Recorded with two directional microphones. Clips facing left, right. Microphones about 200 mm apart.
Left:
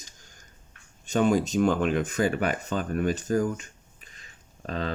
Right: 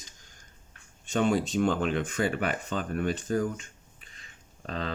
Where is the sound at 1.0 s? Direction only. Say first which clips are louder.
Left 3 dB; 40° left (ahead or behind).